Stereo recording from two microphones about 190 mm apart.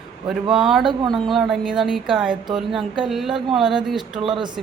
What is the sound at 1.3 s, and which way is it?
A woman's voice, 5° right (ahead or behind).